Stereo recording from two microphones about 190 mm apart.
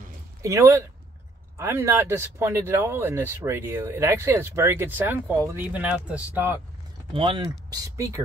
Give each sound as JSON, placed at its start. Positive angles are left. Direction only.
{"t": 0.4, "sound": "speech", "side_deg": -15}
{"t": 7.2, "sound": "speech", "side_deg": -25}